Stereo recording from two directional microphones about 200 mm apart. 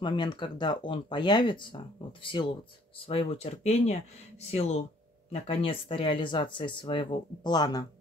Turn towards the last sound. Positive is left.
turn(degrees=20)  # may be behind; listen again after turning